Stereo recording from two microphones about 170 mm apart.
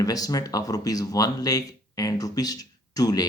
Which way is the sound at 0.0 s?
20° left (ahead or behind).